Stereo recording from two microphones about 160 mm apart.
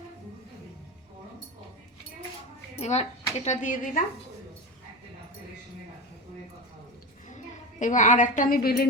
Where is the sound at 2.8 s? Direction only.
45° left (ahead or behind).